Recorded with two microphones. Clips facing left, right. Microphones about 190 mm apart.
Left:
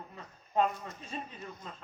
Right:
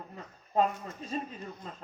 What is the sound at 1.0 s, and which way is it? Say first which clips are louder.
Speech: right 7 dB; 40° right (ahead or behind).